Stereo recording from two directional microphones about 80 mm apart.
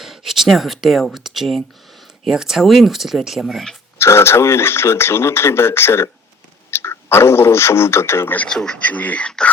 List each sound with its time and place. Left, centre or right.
0.0 s speech: centre
3.9 s speech: left
8.4 s speech: centre